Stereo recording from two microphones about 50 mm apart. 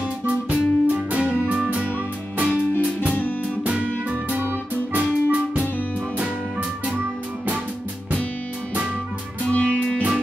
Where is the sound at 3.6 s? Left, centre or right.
Right.